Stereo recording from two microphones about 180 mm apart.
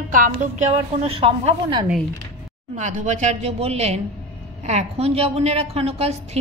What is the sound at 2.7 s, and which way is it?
A woman's voice, 40° right (ahead or behind).